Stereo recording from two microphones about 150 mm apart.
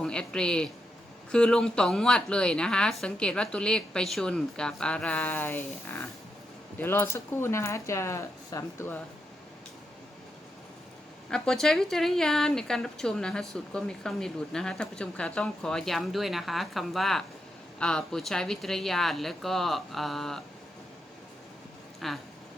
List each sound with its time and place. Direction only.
0.0 s a woman's voice: 5° left (ahead or behind)
11.3 s a woman's voice: 5° left (ahead or behind)
22.0 s a woman's voice: centre (ahead or behind)